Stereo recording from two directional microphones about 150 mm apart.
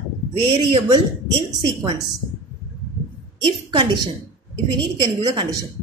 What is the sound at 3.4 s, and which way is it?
Speech, 35° right (ahead or behind).